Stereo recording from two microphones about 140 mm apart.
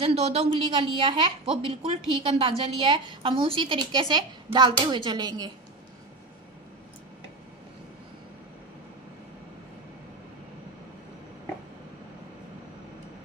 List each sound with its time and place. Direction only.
0.0 s a woman's voice: 45° right (ahead or behind)